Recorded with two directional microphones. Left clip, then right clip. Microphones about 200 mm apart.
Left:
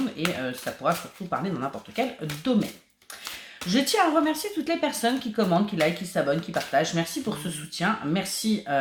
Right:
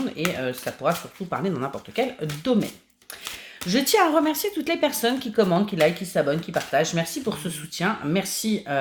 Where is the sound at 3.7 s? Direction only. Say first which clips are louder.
Right 3 dB; 40° right (ahead or behind).